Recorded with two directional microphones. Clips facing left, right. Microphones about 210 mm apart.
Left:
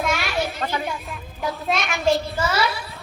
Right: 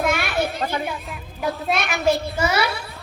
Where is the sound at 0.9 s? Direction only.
Centre (ahead or behind).